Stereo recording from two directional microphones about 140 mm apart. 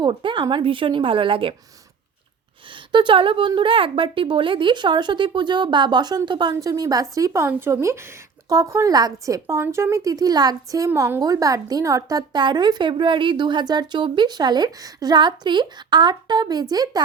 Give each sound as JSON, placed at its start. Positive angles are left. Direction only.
{"t": 0.0, "sound": "speech", "side_deg": -35}
{"t": 2.9, "sound": "speech", "side_deg": -35}